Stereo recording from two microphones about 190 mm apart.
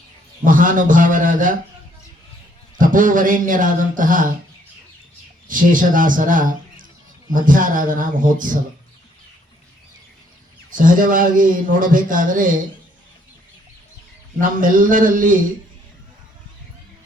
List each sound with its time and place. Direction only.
0.4 s a man's voice: 45° right (ahead or behind)
2.7 s a man's voice: 45° right (ahead or behind)
5.5 s a man's voice: 45° right (ahead or behind)
10.7 s a man's voice: 45° right (ahead or behind)
14.4 s a man's voice: 45° right (ahead or behind)